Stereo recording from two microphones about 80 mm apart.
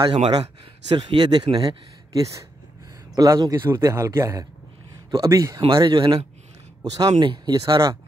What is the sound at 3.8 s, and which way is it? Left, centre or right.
A man's voice, right.